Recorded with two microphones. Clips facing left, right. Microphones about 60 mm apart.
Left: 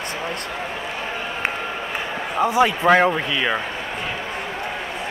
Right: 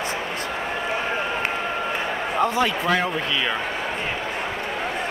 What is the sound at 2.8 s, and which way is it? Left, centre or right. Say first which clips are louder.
Speech: left 7 dB; left.